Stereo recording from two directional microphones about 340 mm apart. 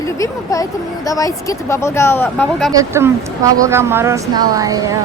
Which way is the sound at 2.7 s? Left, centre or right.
Centre.